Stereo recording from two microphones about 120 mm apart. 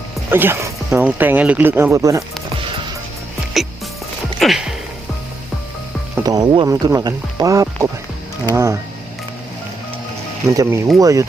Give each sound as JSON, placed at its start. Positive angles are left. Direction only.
{"t": 0.3, "sound": "speech", "side_deg": -20}
{"t": 3.6, "sound": "music", "side_deg": 0}
{"t": 6.2, "sound": "speech", "side_deg": -35}
{"t": 10.5, "sound": "speech", "side_deg": -30}